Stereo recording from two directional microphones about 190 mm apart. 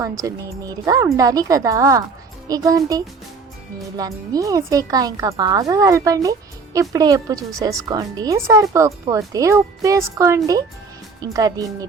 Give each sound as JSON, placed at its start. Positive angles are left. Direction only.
{"t": 0.0, "sound": "a woman's voice", "side_deg": -15}